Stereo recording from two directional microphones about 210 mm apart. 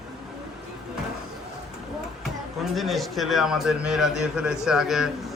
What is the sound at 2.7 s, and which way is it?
Speech, centre (ahead or behind).